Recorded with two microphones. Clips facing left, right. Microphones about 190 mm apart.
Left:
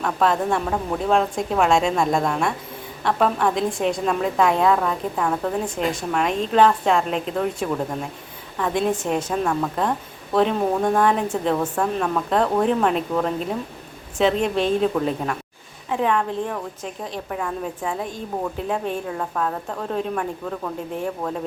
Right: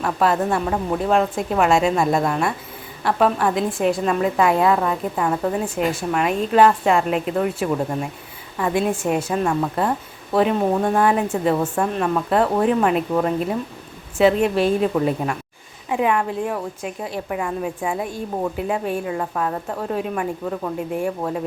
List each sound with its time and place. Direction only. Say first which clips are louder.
0.0 s a woman's voice: right 1 dB; 5° right (ahead or behind)
21.2 s a woman's voice: right 2 dB; 5° right (ahead or behind)